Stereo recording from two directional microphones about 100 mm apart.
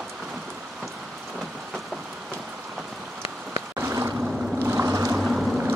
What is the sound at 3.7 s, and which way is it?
Boat, 30° right (ahead or behind).